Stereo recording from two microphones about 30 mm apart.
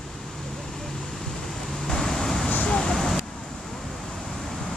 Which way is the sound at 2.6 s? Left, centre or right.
Left.